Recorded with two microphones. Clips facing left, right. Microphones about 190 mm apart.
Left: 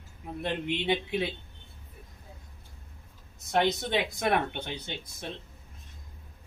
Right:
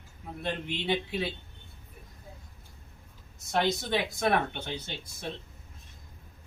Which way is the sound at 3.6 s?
20° left (ahead or behind).